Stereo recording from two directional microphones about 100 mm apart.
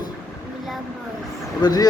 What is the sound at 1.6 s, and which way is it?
Speech, 40° left (ahead or behind).